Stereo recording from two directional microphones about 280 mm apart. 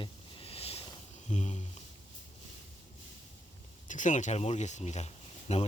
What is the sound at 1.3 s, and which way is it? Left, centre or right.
Speech, left.